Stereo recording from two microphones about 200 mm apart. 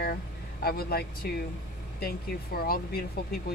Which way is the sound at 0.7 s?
50° left (ahead or behind).